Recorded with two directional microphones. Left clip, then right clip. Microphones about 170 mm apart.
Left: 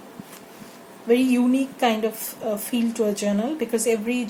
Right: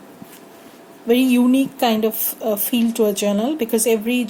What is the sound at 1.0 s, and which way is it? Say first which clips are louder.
A woman's voice: right 3 dB; 60° right (ahead or behind).